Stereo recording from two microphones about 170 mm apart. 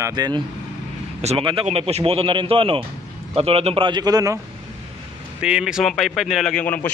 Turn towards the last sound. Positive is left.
turn(degrees=10)  # may be behind; listen again after turning